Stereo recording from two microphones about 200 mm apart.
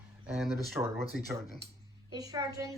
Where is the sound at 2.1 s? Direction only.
20° right (ahead or behind).